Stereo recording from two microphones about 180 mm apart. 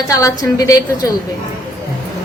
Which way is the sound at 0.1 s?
20° left (ahead or behind).